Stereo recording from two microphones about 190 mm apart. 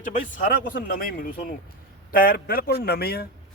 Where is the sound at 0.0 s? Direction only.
45° left (ahead or behind).